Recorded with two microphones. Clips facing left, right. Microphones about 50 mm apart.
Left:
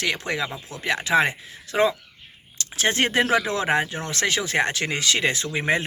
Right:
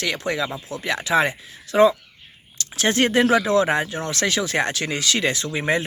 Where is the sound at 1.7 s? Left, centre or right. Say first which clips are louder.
Right 5 dB; left.